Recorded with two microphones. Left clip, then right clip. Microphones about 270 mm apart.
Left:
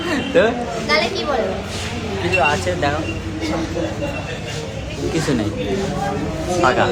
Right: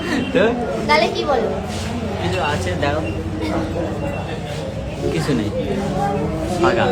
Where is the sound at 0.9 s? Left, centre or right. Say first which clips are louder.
Right 2 dB; centre.